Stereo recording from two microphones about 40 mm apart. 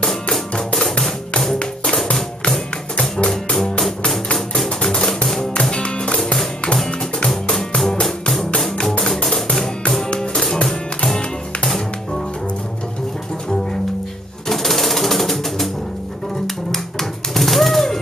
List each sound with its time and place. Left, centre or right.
0.1 s music: centre
3.0 s music: left
4.8 s music: centre
7.5 s music: centre
14.5 s music: centre
17.3 s a sound: centre